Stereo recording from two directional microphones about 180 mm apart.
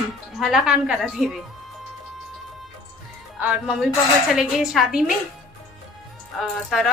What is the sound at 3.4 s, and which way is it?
A woman's voice, 5° right (ahead or behind).